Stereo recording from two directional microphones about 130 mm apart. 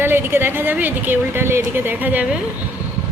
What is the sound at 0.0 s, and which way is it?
A woman's voice, 15° right (ahead or behind).